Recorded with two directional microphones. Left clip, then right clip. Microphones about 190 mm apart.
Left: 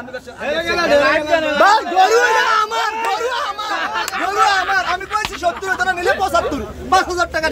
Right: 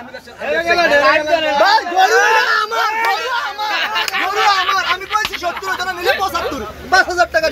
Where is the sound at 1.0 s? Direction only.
45° left (ahead or behind).